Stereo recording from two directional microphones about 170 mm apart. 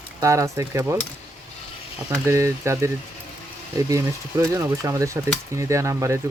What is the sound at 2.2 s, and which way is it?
Speech, 15° right (ahead or behind).